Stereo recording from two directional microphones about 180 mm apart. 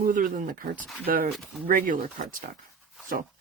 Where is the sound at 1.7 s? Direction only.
50° right (ahead or behind).